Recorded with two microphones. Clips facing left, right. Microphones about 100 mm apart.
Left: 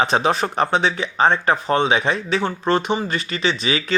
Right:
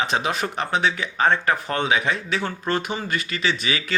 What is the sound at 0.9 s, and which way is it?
Speech, 25° left (ahead or behind).